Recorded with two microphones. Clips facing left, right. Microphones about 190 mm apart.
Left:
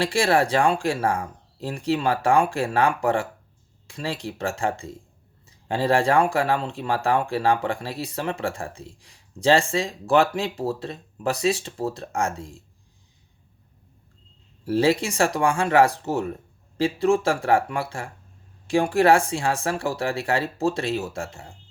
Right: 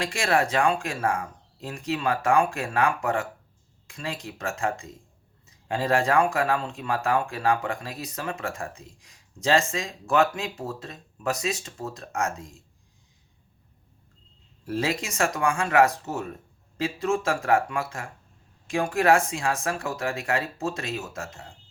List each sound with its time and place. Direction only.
0.0 s speech: 30° left (ahead or behind)
14.6 s speech: 30° left (ahead or behind)